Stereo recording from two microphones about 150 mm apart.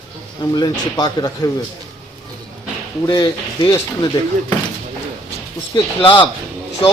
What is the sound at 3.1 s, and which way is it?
Speech, 25° left (ahead or behind).